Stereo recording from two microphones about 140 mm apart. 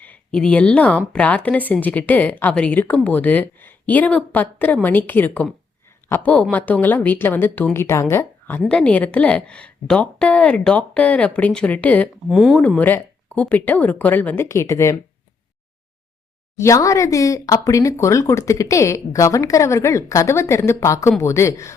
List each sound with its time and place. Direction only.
0.0 s speech: 10° left (ahead or behind)
12.3 s speech: centre (ahead or behind)
12.6 s speech: 10° left (ahead or behind)
16.6 s speech: 20° left (ahead or behind)